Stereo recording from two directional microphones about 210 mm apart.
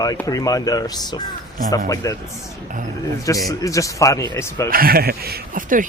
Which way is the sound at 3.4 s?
15° left (ahead or behind).